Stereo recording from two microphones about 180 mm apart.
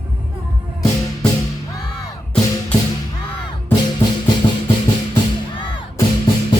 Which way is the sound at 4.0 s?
25° left (ahead or behind).